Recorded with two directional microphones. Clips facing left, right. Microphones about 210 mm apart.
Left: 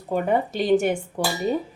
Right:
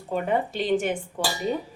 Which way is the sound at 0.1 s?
40° left (ahead or behind).